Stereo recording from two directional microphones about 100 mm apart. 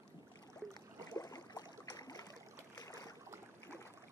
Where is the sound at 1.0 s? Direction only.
35° left (ahead or behind).